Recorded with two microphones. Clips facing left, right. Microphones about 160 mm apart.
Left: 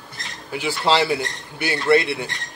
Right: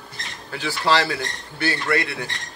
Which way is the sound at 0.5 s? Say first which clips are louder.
Left 1 dB; 20° left (ahead or behind).